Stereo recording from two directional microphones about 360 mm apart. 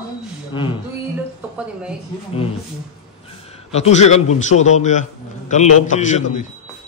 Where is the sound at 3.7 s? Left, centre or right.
Centre.